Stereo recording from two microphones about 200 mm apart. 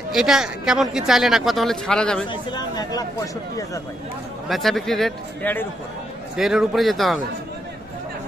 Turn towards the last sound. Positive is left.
turn(degrees=0)  # may be behind; listen again after turning